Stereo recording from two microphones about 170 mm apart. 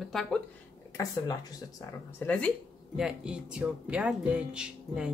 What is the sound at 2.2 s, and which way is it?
Speech, 15° left (ahead or behind).